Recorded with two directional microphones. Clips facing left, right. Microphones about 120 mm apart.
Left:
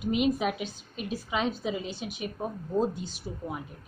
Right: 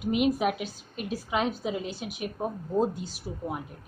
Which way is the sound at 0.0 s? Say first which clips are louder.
Right 1 dB; 5° right (ahead or behind).